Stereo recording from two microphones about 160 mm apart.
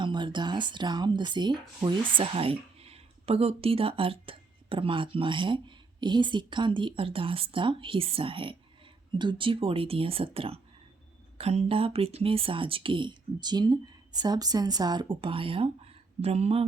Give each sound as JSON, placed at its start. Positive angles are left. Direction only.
{"t": 0.0, "sound": "speech", "side_deg": -30}